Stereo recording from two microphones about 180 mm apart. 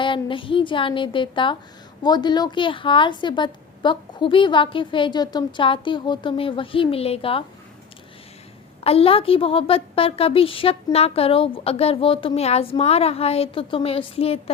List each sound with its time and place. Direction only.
0.0 s a woman's voice: 25° left (ahead or behind)
8.8 s a woman's voice: 35° left (ahead or behind)